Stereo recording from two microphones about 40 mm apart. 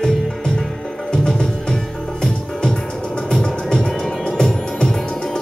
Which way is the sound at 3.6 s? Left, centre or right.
Centre.